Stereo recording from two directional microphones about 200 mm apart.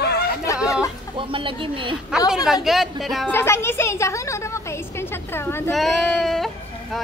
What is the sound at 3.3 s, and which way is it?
A woman's voice, 10° left (ahead or behind).